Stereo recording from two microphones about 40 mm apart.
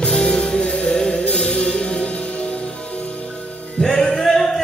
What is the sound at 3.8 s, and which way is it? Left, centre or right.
Music, centre.